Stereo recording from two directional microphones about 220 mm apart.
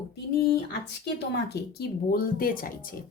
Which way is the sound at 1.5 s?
45° left (ahead or behind).